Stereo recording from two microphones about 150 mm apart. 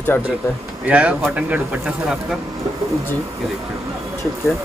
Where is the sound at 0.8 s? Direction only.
10° right (ahead or behind).